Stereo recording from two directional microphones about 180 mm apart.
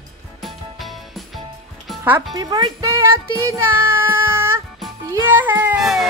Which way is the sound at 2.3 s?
20° right (ahead or behind).